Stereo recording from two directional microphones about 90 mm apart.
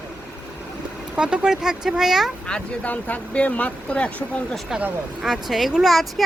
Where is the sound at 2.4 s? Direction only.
15° left (ahead or behind).